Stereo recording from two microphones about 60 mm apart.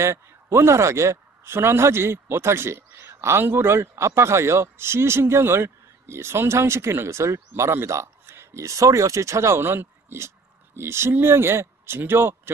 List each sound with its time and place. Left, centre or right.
0.0 s speech: right
9.6 s a man's voice: right